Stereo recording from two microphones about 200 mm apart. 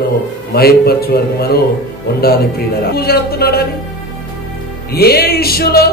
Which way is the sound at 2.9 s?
50° left (ahead or behind).